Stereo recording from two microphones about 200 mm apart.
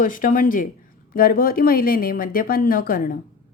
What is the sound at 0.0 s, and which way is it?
Speech, 40° left (ahead or behind).